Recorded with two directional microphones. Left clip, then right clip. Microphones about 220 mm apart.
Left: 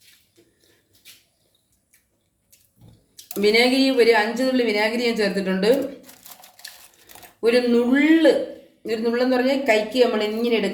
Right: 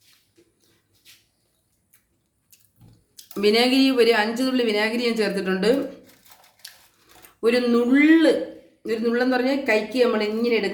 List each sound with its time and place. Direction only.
3.4 s a woman's voice: 20° right (ahead or behind)
7.4 s a woman's voice: 15° right (ahead or behind)